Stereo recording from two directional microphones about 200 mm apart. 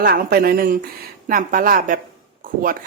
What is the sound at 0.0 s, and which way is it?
A woman's voice, 50° right (ahead or behind).